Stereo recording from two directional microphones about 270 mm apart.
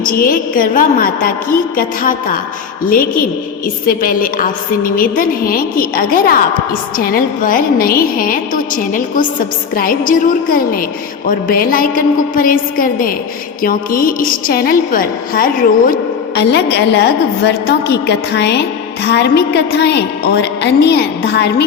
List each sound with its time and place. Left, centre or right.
0.0 s a woman's voice: left